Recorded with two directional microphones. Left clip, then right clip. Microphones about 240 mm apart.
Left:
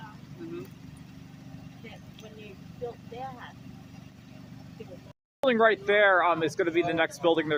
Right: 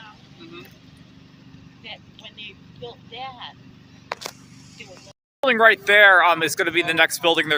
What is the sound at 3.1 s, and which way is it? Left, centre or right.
Speech, left.